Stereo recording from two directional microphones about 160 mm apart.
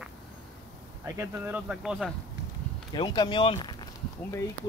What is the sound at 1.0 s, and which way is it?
Speech, 15° right (ahead or behind).